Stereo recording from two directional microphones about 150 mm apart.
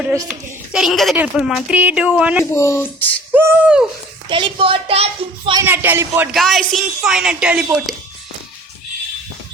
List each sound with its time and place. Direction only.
0.3 s a woman's voice: 5° right (ahead or behind)
2.4 s speech: 20° left (ahead or behind)
3.3 s speech: 10° right (ahead or behind)
4.3 s a child's voice: 35° right (ahead or behind)
5.6 s speech: 15° right (ahead or behind)
6.3 s a woman's voice: centre (ahead or behind)